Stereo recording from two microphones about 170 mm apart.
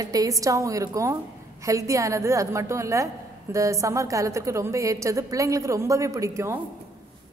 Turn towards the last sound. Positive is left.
turn(degrees=-15)  # may be behind; listen again after turning